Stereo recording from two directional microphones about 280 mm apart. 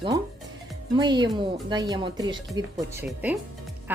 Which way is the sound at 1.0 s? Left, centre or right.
Centre.